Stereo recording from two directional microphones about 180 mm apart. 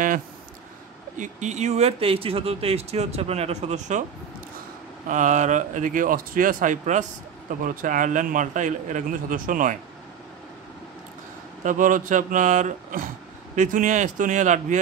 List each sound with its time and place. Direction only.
1.1 s speech: 45° right (ahead or behind)
5.0 s speech: 45° right (ahead or behind)
11.6 s speech: 45° right (ahead or behind)